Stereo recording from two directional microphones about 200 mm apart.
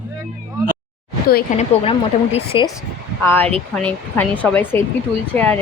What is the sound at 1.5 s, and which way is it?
A woman's voice, 30° left (ahead or behind).